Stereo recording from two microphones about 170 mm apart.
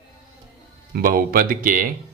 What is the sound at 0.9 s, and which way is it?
Speech, 55° right (ahead or behind).